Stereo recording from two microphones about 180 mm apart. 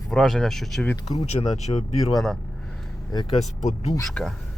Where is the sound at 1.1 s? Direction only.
35° left (ahead or behind).